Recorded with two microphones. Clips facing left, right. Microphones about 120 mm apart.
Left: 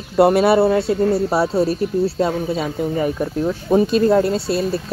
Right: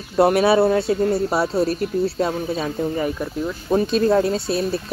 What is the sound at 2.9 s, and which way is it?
Speech, 20° left (ahead or behind).